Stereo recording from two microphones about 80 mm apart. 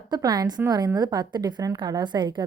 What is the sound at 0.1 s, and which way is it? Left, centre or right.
A woman's voice, right.